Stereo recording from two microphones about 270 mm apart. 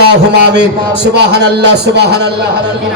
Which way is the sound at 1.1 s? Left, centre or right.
Right.